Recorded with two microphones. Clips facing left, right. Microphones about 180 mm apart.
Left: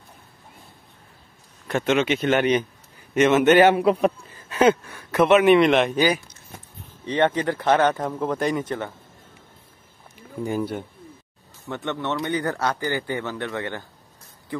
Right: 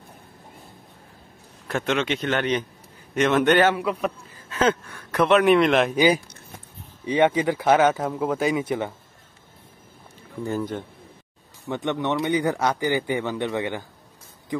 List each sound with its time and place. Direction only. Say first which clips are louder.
1.7 s a man's voice: left 3 dB; centre (ahead or behind)
3.7 s a man's voice: left 6 dB; 30° left (ahead or behind)
4.5 s a man's voice: left 4 dB; 10° left (ahead or behind)
7.1 s a man's voice: right 2 dB; 10° right (ahead or behind)
10.4 s speech: left 1 dB; 10° left (ahead or behind)
11.6 s a man's voice: right 3 dB; 15° right (ahead or behind)